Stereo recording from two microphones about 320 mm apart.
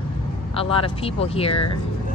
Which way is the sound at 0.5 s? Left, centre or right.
Centre.